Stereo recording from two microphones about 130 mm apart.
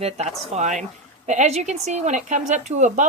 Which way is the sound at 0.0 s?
55° right (ahead or behind).